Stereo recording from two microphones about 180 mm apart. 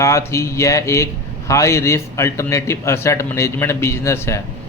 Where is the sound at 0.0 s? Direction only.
15° left (ahead or behind).